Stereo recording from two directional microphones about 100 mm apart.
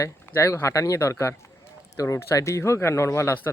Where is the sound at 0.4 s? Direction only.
30° left (ahead or behind).